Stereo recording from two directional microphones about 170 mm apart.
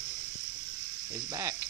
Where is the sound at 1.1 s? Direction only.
20° right (ahead or behind).